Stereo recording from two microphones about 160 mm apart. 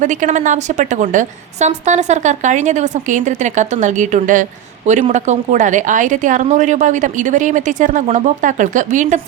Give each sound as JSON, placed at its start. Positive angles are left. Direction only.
{"t": 0.0, "sound": "a woman's voice", "side_deg": -50}